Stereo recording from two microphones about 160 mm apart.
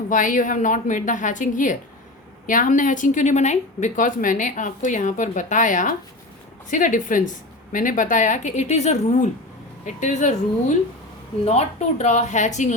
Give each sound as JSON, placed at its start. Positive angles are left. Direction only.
{"t": 0.1, "sound": "a woman's voice", "side_deg": 55}